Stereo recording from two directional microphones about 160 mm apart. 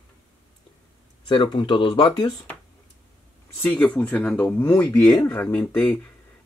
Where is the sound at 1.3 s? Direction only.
35° left (ahead or behind).